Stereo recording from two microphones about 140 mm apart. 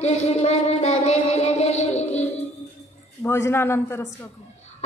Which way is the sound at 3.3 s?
20° left (ahead or behind).